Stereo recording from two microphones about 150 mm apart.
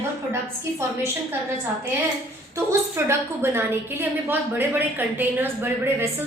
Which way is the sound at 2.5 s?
15° right (ahead or behind).